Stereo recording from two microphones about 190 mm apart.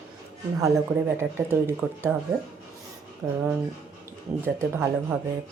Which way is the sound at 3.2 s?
15° right (ahead or behind).